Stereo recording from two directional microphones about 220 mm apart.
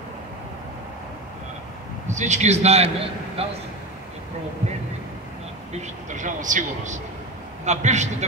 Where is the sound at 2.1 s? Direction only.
30° right (ahead or behind).